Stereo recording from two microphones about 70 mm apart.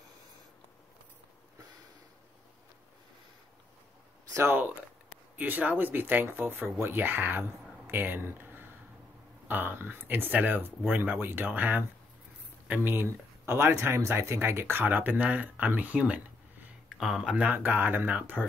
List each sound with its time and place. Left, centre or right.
4.3 s speech: right
5.4 s speech: right
12.9 s speech: right
17.0 s speech: centre; by 18.4 s right